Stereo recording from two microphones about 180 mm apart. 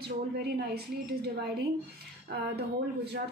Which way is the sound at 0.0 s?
60° right (ahead or behind).